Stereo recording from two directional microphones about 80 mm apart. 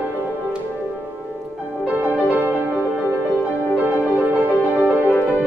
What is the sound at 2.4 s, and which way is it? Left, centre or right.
Music, right.